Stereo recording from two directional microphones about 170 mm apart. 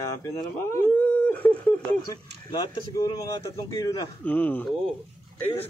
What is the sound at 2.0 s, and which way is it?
Speech, 20° left (ahead or behind).